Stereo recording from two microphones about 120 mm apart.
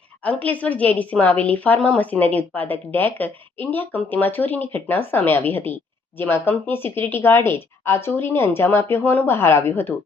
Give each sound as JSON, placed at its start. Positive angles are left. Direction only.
{"t": 0.2, "sound": "a woman's voice", "side_deg": 15}